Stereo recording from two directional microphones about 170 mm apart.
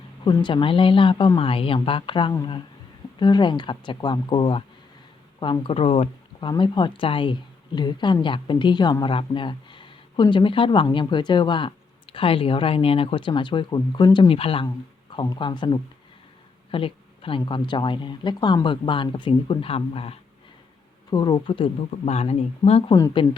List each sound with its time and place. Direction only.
0.3 s a woman's voice: 30° left (ahead or behind)
6.5 s a woman's voice: 25° left (ahead or behind)
21.1 s speech: 25° left (ahead or behind)